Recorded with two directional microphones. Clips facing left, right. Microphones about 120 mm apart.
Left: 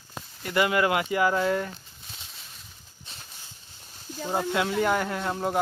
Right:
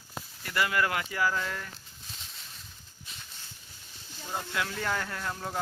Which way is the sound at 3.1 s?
30° left (ahead or behind).